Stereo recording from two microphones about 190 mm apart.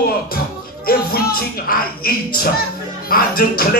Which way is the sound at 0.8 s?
50° left (ahead or behind).